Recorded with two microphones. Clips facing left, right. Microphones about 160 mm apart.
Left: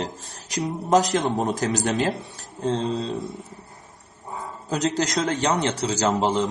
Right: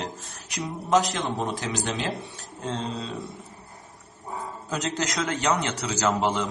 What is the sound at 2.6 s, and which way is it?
Speech, 30° left (ahead or behind).